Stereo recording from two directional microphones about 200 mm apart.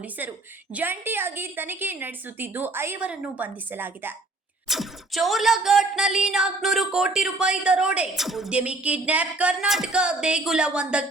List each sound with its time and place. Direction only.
0.2 s a woman's voice: 10° right (ahead or behind)